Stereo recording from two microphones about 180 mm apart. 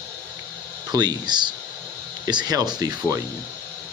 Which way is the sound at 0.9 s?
20° right (ahead or behind).